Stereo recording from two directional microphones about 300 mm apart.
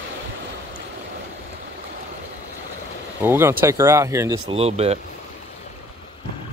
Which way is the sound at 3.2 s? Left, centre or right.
Centre.